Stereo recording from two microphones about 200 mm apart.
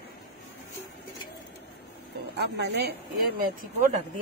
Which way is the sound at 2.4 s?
55° right (ahead or behind).